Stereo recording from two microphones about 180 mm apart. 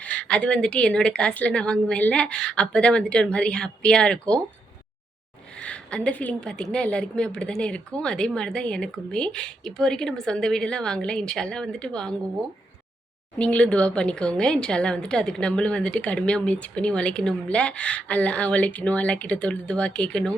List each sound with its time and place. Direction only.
0.0 s a woman's voice: 5° left (ahead or behind)
5.5 s a woman's voice: 5° left (ahead or behind)
13.4 s a woman's voice: 5° left (ahead or behind)